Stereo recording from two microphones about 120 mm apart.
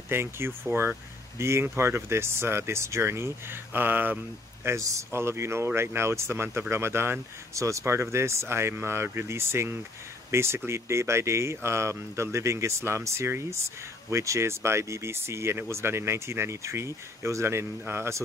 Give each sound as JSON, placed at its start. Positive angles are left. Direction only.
{"t": 0.1, "sound": "speech", "side_deg": -20}
{"t": 4.6, "sound": "speech", "side_deg": -25}